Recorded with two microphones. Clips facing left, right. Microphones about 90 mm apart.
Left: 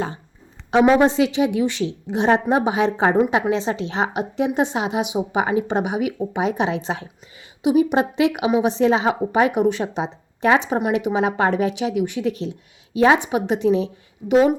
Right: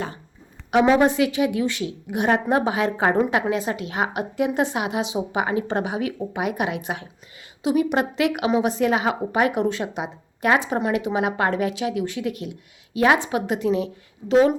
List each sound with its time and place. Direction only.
0.7 s speech: 25° left (ahead or behind)
7.6 s speech: 20° left (ahead or behind)